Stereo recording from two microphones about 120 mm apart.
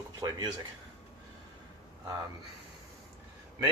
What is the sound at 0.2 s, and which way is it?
Speech, 35° right (ahead or behind).